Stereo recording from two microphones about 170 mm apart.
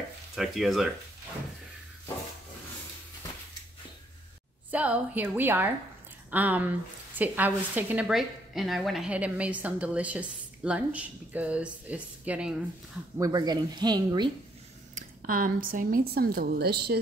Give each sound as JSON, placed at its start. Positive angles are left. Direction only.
{"t": 0.4, "sound": "speech", "side_deg": 0}
{"t": 4.6, "sound": "a woman's voice", "side_deg": -10}
{"t": 13.2, "sound": "speech", "side_deg": -25}
{"t": 15.0, "sound": "speech", "side_deg": -55}